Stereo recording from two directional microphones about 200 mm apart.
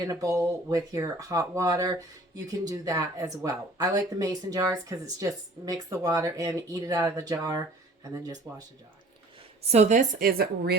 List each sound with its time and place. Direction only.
0.0 s speech: 15° right (ahead or behind)
9.6 s a woman's voice: 35° right (ahead or behind); by 10.8 s 50° right (ahead or behind)